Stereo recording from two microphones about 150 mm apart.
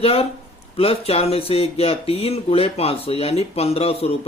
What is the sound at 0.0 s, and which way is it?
A man's voice, 40° left (ahead or behind).